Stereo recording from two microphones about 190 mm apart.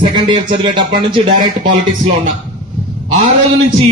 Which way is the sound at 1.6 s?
40° right (ahead or behind).